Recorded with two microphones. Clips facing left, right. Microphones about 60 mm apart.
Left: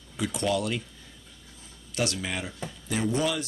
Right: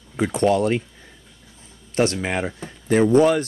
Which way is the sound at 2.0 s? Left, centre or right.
Right.